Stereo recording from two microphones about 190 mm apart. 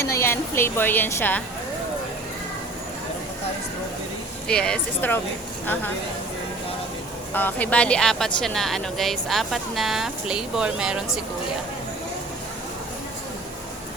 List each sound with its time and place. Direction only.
0.0 s a woman's voice: 15° left (ahead or behind)
4.4 s speech: 5° left (ahead or behind)
7.3 s a woman's voice: 10° left (ahead or behind)